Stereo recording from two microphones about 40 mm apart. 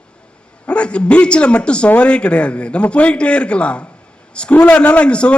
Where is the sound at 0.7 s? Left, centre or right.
Left.